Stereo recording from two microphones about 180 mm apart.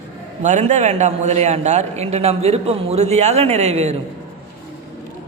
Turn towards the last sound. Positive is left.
turn(degrees=-35)  # may be behind; listen again after turning